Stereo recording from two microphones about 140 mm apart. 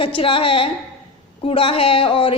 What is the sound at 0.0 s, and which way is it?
A woman's voice, 40° left (ahead or behind).